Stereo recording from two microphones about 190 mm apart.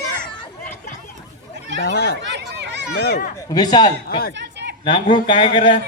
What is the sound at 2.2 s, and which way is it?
Hubbub, 65° right (ahead or behind).